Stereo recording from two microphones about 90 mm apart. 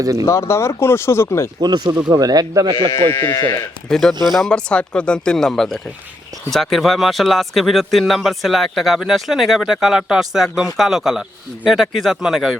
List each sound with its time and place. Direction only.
0.0 s speech: 40° right (ahead or behind)
0.3 s speech: 30° left (ahead or behind)
1.6 s speech: 45° right (ahead or behind)
3.1 s speech: 25° left (ahead or behind)
3.8 s speech: 5° left (ahead or behind)